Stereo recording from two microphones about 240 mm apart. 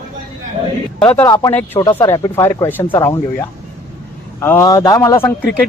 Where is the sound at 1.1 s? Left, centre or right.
Centre.